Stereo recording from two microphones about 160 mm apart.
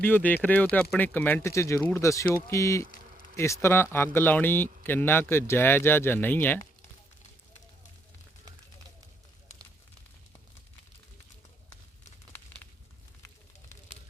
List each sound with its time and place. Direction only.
0.0 s speech: 10° left (ahead or behind)